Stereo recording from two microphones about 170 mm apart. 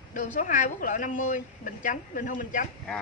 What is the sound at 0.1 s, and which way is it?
A woman's voice, 45° left (ahead or behind).